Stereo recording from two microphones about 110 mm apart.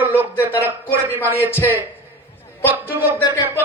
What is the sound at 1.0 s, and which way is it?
Speech, 20° right (ahead or behind).